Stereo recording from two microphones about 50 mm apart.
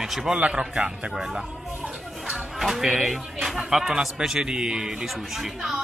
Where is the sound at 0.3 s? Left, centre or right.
Centre.